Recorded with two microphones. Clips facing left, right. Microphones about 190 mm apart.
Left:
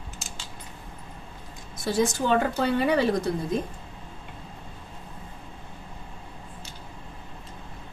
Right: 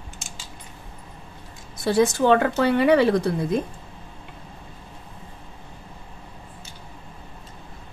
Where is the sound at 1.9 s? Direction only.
65° right (ahead or behind).